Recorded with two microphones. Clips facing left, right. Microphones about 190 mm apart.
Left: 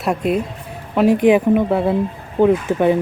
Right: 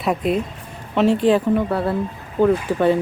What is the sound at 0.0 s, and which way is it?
Speech, centre (ahead or behind).